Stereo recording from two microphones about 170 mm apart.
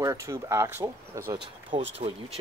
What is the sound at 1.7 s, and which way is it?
Speech, 30° right (ahead or behind).